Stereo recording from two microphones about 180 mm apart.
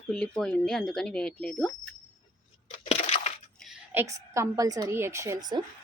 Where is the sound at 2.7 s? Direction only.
35° left (ahead or behind).